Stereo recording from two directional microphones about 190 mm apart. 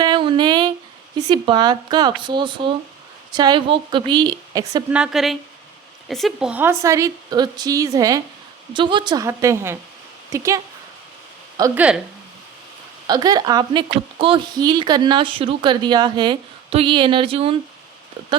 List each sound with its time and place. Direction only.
0.0 s a sound: 25° right (ahead or behind)
1.3 s speech: 25° right (ahead or behind)
4.9 s a woman's voice: 5° right (ahead or behind)
11.7 s a woman's voice: 5° right (ahead or behind)
13.1 s speech: 20° right (ahead or behind)